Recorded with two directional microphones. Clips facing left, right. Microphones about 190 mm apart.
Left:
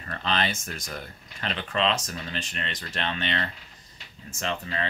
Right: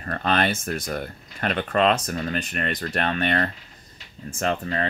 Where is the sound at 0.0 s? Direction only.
50° right (ahead or behind).